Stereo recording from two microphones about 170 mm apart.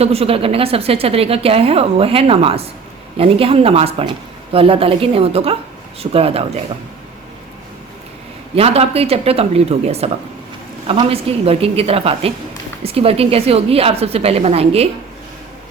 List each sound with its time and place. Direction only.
0.0 s a woman's voice: 35° right (ahead or behind)
8.5 s a woman's voice: 35° right (ahead or behind)